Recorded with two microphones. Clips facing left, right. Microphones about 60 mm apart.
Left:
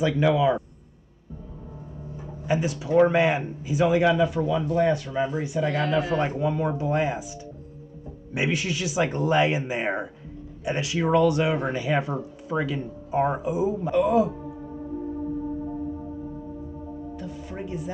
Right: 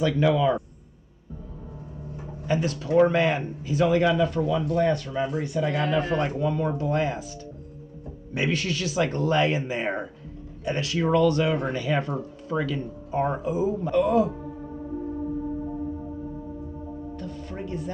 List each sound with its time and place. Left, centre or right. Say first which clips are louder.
0.0 s speech: left 1 dB; centre
2.4 s speech: even; centre
5.7 s speech: left 1 dB; centre
5.9 s speech: left 1 dB; centre
8.4 s speech: even; centre
17.2 s music: even; centre